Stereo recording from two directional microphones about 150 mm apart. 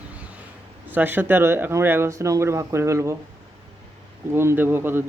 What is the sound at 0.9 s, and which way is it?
Speech, 10° right (ahead or behind).